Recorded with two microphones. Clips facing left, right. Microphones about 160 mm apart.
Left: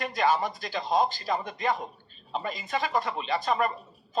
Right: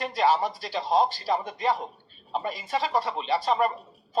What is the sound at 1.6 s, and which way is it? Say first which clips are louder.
Speech: right 2 dB; 25° right (ahead or behind).